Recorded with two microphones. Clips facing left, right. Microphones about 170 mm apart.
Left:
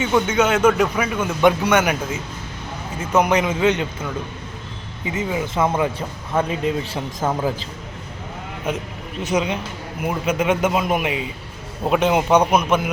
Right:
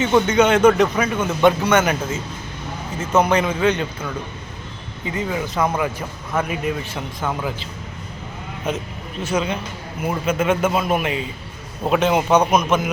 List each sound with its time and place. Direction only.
0.0 s a man's voice: 5° left (ahead or behind); by 7.4 s 35° left (ahead or behind)
8.7 s a man's voice: 10° left (ahead or behind)